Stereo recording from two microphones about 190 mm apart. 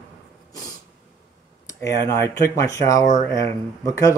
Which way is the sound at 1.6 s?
15° left (ahead or behind).